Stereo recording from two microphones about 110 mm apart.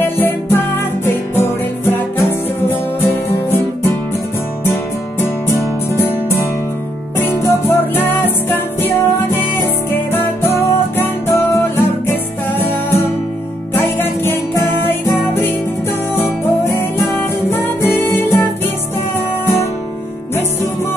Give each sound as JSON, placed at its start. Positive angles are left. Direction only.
{"t": 0.0, "sound": "music", "side_deg": 20}
{"t": 7.4, "sound": "music", "side_deg": 20}
{"t": 13.7, "sound": "music", "side_deg": 20}